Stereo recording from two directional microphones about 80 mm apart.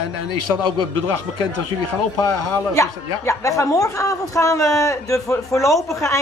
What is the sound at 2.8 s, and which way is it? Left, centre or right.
Speech, left.